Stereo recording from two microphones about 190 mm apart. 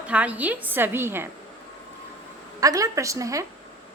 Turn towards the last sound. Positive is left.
turn(degrees=-15)  # may be behind; listen again after turning